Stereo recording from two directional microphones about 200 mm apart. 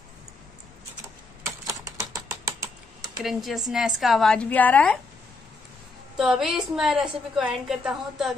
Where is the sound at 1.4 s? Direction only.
15° right (ahead or behind).